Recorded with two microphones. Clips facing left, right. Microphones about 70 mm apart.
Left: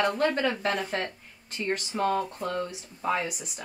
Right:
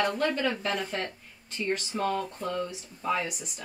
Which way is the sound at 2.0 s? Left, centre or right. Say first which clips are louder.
Left 4 dB; centre.